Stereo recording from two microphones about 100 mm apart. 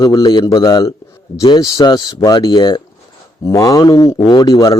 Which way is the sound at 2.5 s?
50° left (ahead or behind).